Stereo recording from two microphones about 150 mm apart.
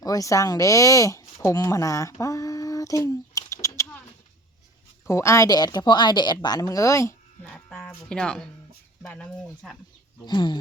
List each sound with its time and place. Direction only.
0.0 s speech: 20° left (ahead or behind)
5.0 s a woman's voice: 20° left (ahead or behind)
7.4 s music: 5° left (ahead or behind)
7.9 s speech: 5° left (ahead or behind)
10.2 s a woman's voice: 30° left (ahead or behind)